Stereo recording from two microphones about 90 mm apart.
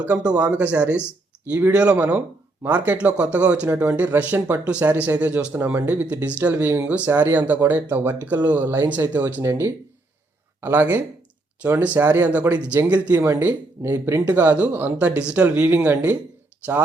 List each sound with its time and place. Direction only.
0.0 s speech: 15° right (ahead or behind)
9.4 s speech: 30° right (ahead or behind)